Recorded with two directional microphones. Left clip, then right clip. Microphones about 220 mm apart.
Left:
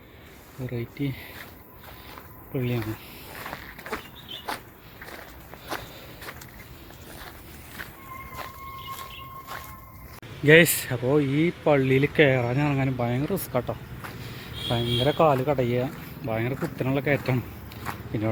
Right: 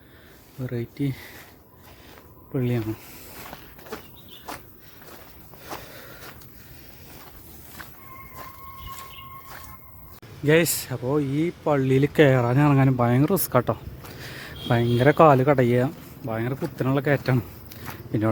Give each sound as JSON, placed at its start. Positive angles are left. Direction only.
{"t": 0.7, "sound": "speech", "side_deg": -35}
{"t": 2.5, "sound": "speech", "side_deg": -30}
{"t": 10.4, "sound": "speech", "side_deg": -5}
{"t": 11.9, "sound": "speech", "side_deg": -25}
{"t": 16.2, "sound": "speech", "side_deg": -20}
{"t": 16.7, "sound": "speech", "side_deg": -30}